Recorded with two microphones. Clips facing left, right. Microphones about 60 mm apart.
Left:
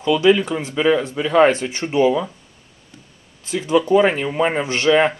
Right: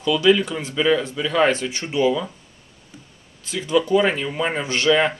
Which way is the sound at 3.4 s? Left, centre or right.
Left.